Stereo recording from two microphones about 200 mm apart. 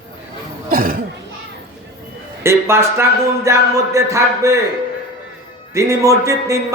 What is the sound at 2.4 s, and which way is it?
Speech, 15° right (ahead or behind).